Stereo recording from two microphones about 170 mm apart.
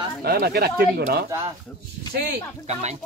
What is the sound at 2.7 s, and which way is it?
Speech, 40° right (ahead or behind).